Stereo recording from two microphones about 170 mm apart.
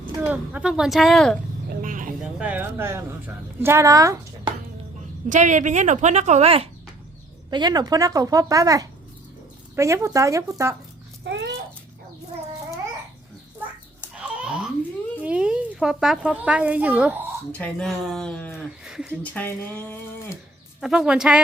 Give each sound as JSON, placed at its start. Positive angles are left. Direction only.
{"t": 0.2, "sound": "speech", "side_deg": -10}
{"t": 1.8, "sound": "a sound", "side_deg": -50}
{"t": 2.4, "sound": "a woman's voice", "side_deg": -10}
{"t": 5.3, "sound": "a woman's voice", "side_deg": -45}
{"t": 7.5, "sound": "a woman's voice", "side_deg": -25}
{"t": 11.3, "sound": "a sound", "side_deg": -90}
{"t": 14.2, "sound": "a sound", "side_deg": -5}
{"t": 15.2, "sound": "speech", "side_deg": -5}
{"t": 17.5, "sound": "speech", "side_deg": 5}
{"t": 18.9, "sound": "speech", "side_deg": -5}
{"t": 19.2, "sound": "speech", "side_deg": 10}
{"t": 20.8, "sound": "speech", "side_deg": -5}